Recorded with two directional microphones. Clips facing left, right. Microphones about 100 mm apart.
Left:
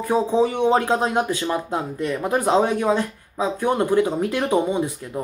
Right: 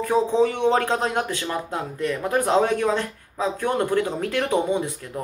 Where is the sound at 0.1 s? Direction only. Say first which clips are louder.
Left 1 dB; 10° left (ahead or behind).